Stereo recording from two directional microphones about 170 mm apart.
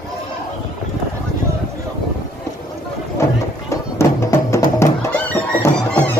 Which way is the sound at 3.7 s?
15° left (ahead or behind).